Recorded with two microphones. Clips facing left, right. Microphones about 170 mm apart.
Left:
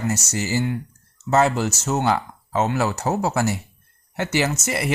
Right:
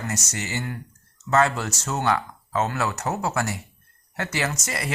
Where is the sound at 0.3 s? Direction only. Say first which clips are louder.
Left 7 dB; 30° left (ahead or behind).